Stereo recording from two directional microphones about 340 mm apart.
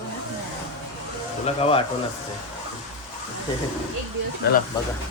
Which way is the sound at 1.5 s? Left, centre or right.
Centre.